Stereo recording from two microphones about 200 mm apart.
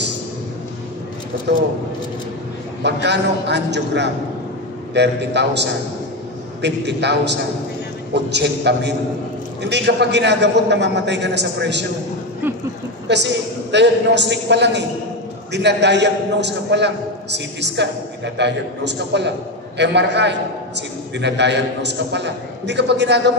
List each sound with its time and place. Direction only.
2.8 s a man's voice: 60° right (ahead or behind)
13.1 s a man's voice: 60° right (ahead or behind)